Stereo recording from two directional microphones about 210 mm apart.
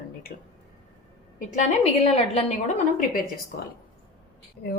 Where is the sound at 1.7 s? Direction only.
30° left (ahead or behind).